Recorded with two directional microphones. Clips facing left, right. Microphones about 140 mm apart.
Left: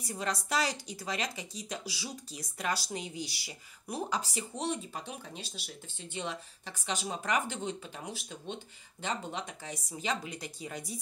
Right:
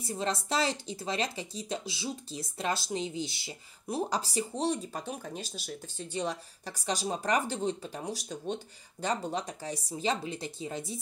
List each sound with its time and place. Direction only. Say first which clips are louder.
0.0 s speech: right 3 dB; 25° right (ahead or behind)